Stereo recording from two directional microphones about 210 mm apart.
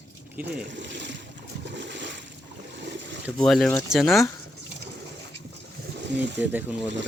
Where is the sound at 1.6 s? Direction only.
55° right (ahead or behind).